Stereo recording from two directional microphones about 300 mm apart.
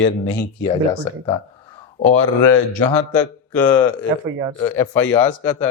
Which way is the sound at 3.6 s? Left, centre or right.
Centre.